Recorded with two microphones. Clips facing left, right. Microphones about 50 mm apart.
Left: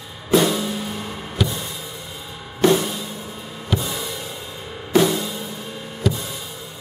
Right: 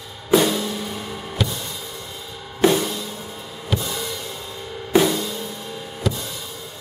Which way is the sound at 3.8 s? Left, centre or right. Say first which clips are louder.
Even; centre.